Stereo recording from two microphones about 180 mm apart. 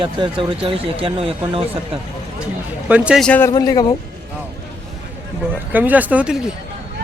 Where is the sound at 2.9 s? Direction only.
5° right (ahead or behind).